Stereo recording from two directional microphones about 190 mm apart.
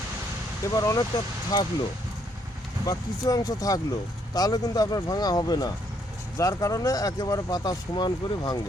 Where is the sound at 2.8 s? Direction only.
20° left (ahead or behind).